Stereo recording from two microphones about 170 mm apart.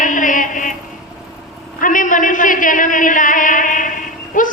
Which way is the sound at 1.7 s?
50° left (ahead or behind).